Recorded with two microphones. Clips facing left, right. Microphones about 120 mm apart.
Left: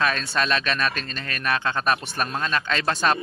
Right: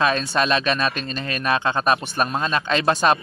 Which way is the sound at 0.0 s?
20° right (ahead or behind).